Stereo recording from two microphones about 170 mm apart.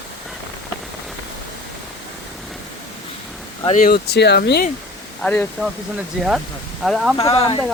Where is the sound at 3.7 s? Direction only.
55° left (ahead or behind); by 4.6 s 75° left (ahead or behind).